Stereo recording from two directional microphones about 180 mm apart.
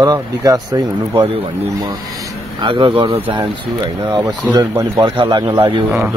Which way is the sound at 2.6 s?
25° right (ahead or behind).